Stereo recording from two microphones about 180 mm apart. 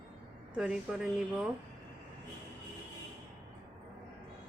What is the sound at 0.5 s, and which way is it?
Speech, 5° right (ahead or behind).